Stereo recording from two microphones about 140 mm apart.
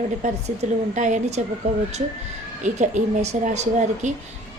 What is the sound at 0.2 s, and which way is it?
A woman's voice, 55° right (ahead or behind).